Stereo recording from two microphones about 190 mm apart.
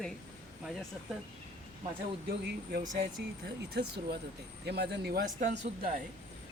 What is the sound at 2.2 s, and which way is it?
Speech, 55° right (ahead or behind).